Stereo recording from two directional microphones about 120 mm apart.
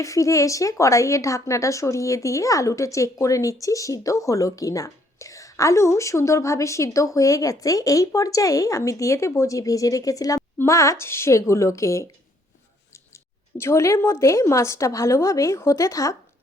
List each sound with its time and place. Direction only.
0.0 s speech: 25° left (ahead or behind)